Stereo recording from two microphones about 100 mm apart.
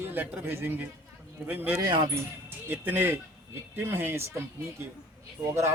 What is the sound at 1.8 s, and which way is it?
Speech, 40° right (ahead or behind).